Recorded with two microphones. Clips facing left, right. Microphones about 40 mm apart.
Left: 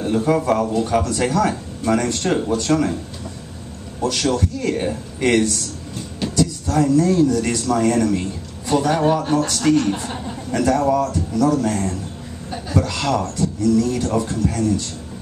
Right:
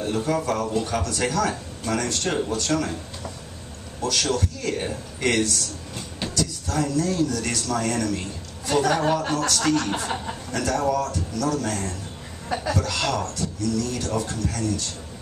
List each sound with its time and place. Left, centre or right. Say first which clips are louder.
0.0 s a man's voice: left 6 dB; centre
4.0 s a man's voice: left 4 dB; centre
10.5 s a man's voice: left 6 dB; centre